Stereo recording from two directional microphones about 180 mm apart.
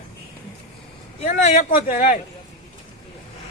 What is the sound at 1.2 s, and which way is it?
Speech, 45° left (ahead or behind).